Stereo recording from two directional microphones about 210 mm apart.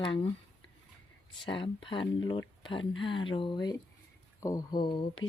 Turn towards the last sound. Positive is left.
turn(degrees=25)  # may be behind; listen again after turning